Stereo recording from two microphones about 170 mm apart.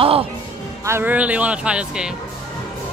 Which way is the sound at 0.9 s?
10° right (ahead or behind).